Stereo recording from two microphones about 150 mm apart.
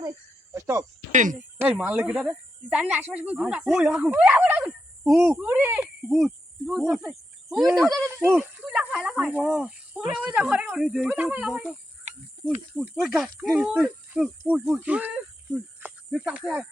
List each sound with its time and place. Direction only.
0.5 s a sound: 20° right (ahead or behind)
1.1 s speech: 60° right (ahead or behind)
1.5 s speech: 10° right (ahead or behind)
6.1 s cricket: centre (ahead or behind)
8.0 s snake: 15° right (ahead or behind)
12.9 s cricket: centre (ahead or behind)